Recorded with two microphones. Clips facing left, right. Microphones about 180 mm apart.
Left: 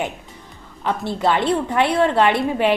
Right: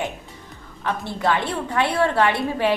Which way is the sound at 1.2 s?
20° left (ahead or behind).